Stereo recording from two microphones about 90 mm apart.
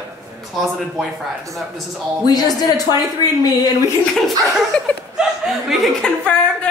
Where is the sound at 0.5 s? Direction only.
Centre (ahead or behind).